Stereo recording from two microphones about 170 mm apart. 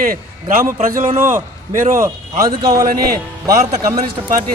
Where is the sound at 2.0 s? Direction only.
20° right (ahead or behind).